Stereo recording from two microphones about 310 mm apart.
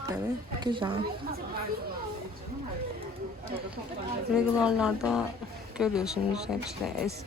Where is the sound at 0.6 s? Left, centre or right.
Centre.